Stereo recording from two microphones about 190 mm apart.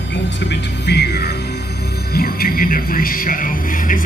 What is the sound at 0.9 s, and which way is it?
Music, 60° left (ahead or behind).